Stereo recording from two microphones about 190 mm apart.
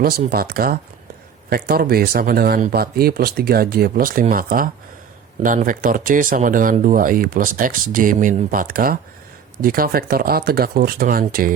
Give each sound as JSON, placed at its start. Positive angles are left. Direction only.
{"t": 0.0, "sound": "speech", "side_deg": -50}